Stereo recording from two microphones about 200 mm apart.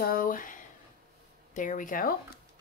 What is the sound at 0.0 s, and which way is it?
Speech, 45° left (ahead or behind).